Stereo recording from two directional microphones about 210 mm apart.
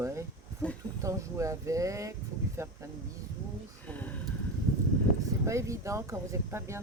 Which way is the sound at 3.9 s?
10° left (ahead or behind).